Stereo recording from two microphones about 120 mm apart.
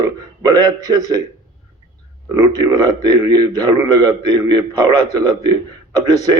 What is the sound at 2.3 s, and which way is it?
A man's voice, 30° right (ahead or behind).